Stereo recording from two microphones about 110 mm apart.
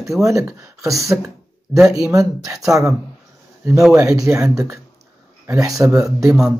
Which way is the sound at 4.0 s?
30° right (ahead or behind).